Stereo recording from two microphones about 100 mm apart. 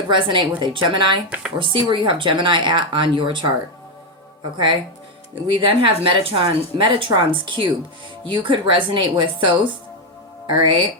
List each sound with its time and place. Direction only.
0.1 s a woman's voice: 55° right (ahead or behind)
4.5 s a woman's voice: 55° right (ahead or behind)